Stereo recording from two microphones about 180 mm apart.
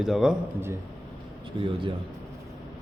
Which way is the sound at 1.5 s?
25° right (ahead or behind).